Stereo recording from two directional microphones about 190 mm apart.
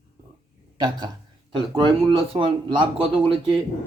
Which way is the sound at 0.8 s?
20° right (ahead or behind).